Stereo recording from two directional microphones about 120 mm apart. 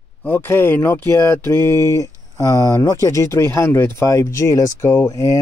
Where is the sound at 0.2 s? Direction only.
15° left (ahead or behind).